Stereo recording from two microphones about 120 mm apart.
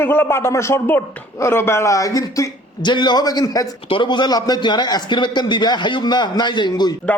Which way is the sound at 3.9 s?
40° left (ahead or behind).